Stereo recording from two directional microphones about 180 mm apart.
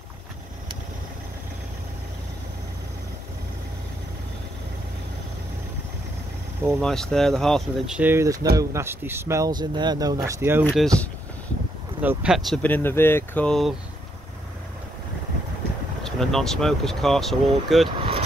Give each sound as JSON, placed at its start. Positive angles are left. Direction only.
{"t": 6.8, "sound": "speech", "side_deg": 5}
{"t": 10.6, "sound": "speech", "side_deg": 0}
{"t": 12.0, "sound": "speech", "side_deg": -10}
{"t": 12.6, "sound": "speech", "side_deg": 10}
{"t": 16.0, "sound": "speech", "side_deg": 0}